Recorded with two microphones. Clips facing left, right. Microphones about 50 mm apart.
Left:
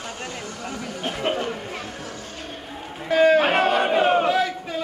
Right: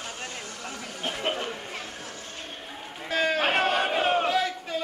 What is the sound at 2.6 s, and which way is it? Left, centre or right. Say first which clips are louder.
Crowd: left 9 dB; centre.